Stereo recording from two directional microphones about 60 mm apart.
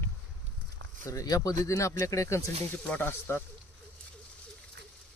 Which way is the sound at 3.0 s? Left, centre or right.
Left.